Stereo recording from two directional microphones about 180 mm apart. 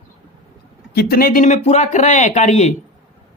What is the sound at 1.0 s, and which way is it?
Speech, 55° left (ahead or behind).